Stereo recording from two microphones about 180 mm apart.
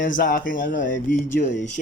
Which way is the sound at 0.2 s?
50° left (ahead or behind).